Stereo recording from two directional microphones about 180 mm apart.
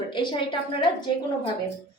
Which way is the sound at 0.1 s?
25° left (ahead or behind).